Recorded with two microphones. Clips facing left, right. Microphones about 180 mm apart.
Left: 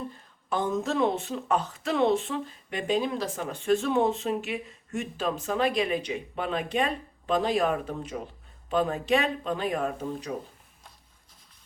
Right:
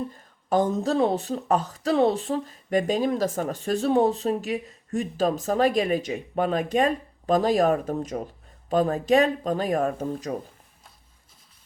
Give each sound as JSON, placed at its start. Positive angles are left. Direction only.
{"t": 0.5, "sound": "speech", "side_deg": -40}